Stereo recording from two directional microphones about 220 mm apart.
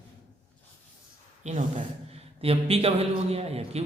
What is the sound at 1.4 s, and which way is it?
A man's voice, 30° right (ahead or behind).